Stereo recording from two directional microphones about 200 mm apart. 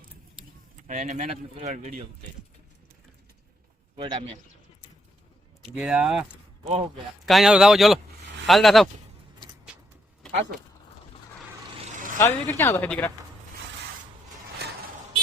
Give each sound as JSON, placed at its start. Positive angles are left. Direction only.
{"t": 0.9, "sound": "speech", "side_deg": -35}
{"t": 3.9, "sound": "a man's voice", "side_deg": -25}
{"t": 5.7, "sound": "a man's voice", "side_deg": -5}
{"t": 6.2, "sound": "a sound", "side_deg": -30}
{"t": 7.3, "sound": "a man's voice", "side_deg": 0}
{"t": 10.2, "sound": "vehicle", "side_deg": 0}
{"t": 12.2, "sound": "speech", "side_deg": 15}